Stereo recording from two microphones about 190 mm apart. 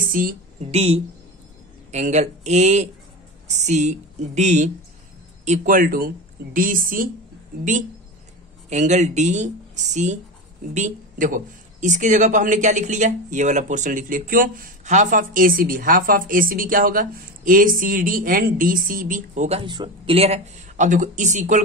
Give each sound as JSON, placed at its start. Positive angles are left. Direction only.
{"t": 0.0, "sound": "a sound", "side_deg": -45}
{"t": 0.7, "sound": "speech", "side_deg": -30}
{"t": 8.6, "sound": "speech", "side_deg": -40}
{"t": 19.6, "sound": "speech", "side_deg": -25}